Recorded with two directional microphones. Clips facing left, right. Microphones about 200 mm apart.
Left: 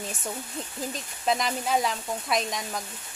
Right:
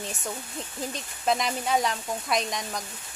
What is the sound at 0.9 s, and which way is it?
Speech, centre (ahead or behind).